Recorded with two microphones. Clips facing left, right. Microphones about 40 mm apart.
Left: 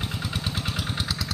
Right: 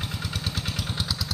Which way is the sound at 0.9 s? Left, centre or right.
Left.